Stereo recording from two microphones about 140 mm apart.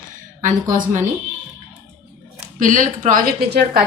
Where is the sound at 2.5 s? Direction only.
70° right (ahead or behind); by 3.8 s 90° right.